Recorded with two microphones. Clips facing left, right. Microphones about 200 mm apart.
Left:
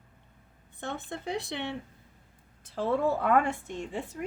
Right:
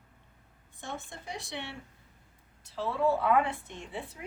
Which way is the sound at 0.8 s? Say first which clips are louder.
Left 5 dB; 60° left (ahead or behind).